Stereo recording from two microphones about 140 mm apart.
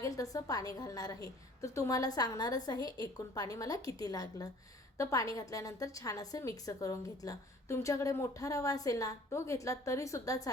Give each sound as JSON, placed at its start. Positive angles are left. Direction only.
{"t": 0.0, "sound": "a woman's voice", "side_deg": 25}